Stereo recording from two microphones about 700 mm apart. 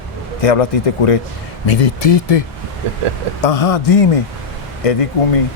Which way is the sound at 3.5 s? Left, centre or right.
Left.